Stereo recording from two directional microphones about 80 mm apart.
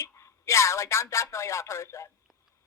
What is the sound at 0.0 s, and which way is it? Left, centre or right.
Speech, left.